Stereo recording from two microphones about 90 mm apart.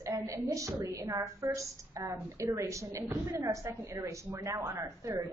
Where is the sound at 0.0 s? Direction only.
35° right (ahead or behind).